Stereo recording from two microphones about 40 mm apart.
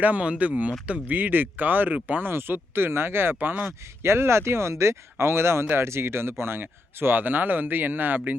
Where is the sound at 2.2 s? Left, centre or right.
Right.